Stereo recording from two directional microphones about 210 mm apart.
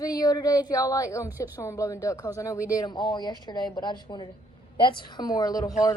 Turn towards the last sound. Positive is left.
turn(degrees=20)  # may be behind; listen again after turning